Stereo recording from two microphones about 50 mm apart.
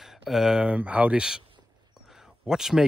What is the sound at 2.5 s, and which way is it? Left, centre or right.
Speech, centre.